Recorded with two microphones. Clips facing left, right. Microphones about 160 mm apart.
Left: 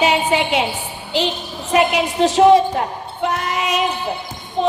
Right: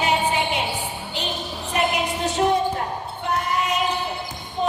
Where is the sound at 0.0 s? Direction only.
90° left.